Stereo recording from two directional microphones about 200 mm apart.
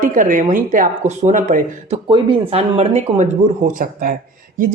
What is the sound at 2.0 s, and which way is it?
Speech, 25° right (ahead or behind).